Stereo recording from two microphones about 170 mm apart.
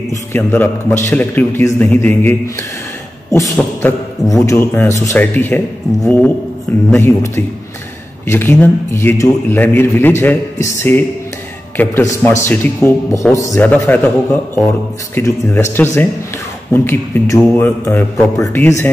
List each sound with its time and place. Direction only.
0.1 s a man's voice: 15° left (ahead or behind)
6.9 s a man's voice: 15° left (ahead or behind)